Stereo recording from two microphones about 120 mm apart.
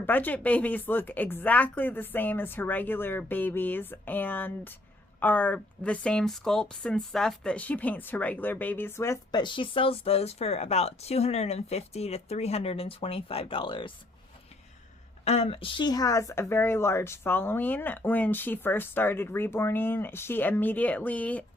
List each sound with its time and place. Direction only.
0.0 s speech: 15° left (ahead or behind)
9.4 s speech: 45° left (ahead or behind)
15.2 s speech: 60° left (ahead or behind); by 21.4 s 10° left (ahead or behind)